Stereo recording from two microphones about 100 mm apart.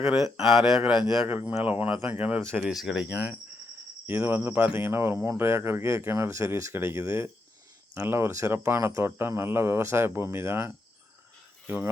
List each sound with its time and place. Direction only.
0.0 s speech: 5° right (ahead or behind)
1.3 s speech: 20° right (ahead or behind)
4.0 s speech: 20° right (ahead or behind)